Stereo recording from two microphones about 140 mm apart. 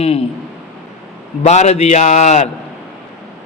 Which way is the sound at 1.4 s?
55° left (ahead or behind).